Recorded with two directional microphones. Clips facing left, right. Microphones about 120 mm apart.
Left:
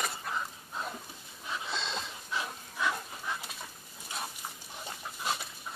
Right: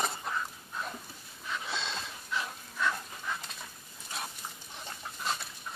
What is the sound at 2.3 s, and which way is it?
Dog, 15° left (ahead or behind).